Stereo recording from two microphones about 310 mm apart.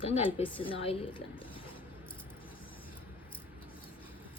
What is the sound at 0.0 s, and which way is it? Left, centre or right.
A woman's voice, centre.